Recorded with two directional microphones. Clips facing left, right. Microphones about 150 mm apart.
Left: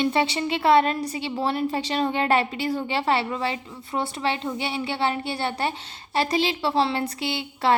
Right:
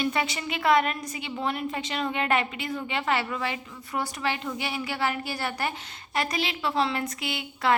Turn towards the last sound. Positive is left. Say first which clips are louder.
# left 3 dB
turn(degrees=30)  # may be behind; listen again after turning